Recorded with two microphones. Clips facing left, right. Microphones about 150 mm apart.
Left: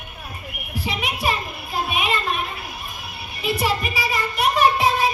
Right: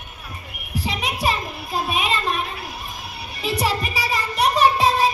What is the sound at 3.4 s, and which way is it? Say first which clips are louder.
Music: even; 35° right (ahead or behind).